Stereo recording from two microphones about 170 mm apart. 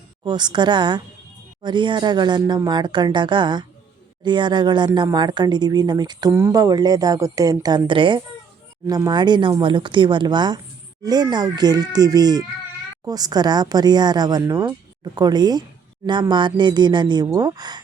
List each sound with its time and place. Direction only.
0.3 s speech: 25° right (ahead or behind)